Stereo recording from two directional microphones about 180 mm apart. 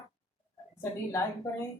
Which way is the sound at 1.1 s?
15° left (ahead or behind).